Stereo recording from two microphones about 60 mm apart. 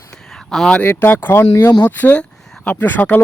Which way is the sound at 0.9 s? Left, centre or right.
Left.